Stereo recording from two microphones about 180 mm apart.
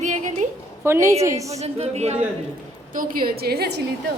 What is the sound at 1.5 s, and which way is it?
Speech, 35° right (ahead or behind).